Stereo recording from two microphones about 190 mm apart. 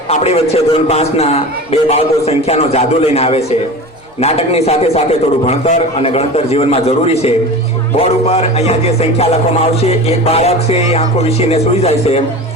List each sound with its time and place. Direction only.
0.1 s a man's voice: 35° left (ahead or behind)